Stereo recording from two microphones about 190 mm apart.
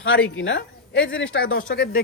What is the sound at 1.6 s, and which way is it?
Speech, 50° left (ahead or behind).